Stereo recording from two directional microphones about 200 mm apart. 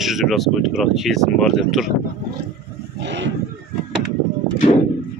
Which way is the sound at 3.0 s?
60° right (ahead or behind).